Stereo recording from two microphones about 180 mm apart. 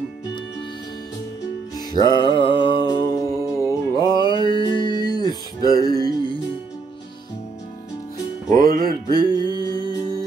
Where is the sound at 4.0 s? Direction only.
25° left (ahead or behind).